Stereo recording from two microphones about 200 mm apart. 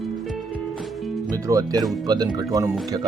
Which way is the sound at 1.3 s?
20° right (ahead or behind).